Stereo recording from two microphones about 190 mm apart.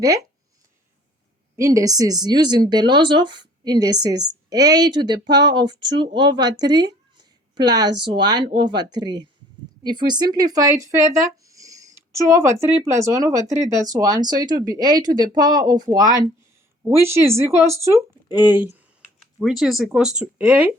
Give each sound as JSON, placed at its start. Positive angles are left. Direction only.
{"t": 0.0, "sound": "speech", "side_deg": -20}
{"t": 1.5, "sound": "speech", "side_deg": -15}
{"t": 11.4, "sound": "a sound", "side_deg": -15}
{"t": 12.8, "sound": "speech", "side_deg": -15}